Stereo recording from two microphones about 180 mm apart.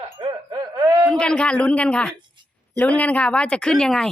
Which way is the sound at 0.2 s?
25° right (ahead or behind).